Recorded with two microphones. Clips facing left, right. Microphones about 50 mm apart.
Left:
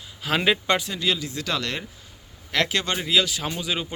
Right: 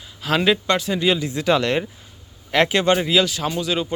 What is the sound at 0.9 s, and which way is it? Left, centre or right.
Speech, right.